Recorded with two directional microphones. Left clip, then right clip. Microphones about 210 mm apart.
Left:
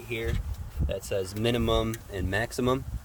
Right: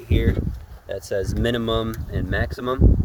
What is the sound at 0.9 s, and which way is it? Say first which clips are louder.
Speech: right 5 dB; 40° right (ahead or behind).